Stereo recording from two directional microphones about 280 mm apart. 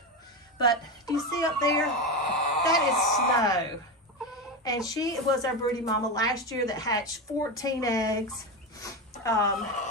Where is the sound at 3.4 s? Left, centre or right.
Centre.